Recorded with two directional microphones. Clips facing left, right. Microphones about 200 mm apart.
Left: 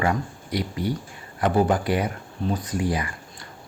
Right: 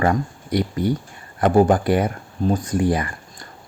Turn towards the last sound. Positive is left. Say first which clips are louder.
# right 4 dB
turn(degrees=-50)  # may be behind; listen again after turning